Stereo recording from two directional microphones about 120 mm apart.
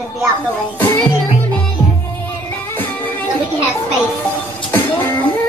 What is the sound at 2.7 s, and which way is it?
Music, 15° left (ahead or behind).